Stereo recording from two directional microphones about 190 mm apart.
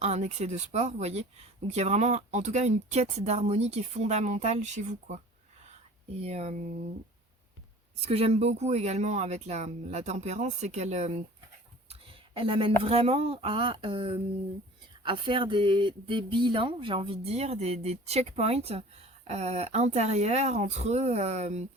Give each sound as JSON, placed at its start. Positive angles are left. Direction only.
{"t": 0.0, "sound": "speech", "side_deg": -35}
{"t": 8.0, "sound": "speech", "side_deg": -30}
{"t": 11.9, "sound": "a sound", "side_deg": -30}
{"t": 12.8, "sound": "speech", "side_deg": -30}